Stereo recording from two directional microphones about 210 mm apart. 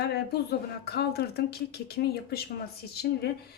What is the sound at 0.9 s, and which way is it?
Speech, 50° left (ahead or behind).